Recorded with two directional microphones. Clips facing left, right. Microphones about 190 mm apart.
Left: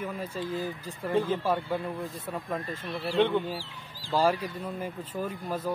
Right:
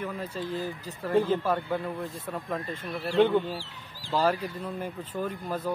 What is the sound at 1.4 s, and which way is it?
A man's voice, 10° left (ahead or behind).